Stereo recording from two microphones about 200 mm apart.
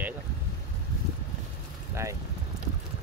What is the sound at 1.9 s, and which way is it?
Speech, 15° right (ahead or behind).